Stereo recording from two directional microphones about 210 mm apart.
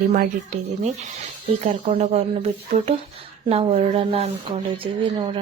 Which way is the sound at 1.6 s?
30° right (ahead or behind).